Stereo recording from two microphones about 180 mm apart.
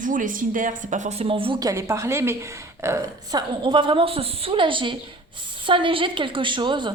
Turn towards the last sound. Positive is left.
turn(degrees=-25)  # may be behind; listen again after turning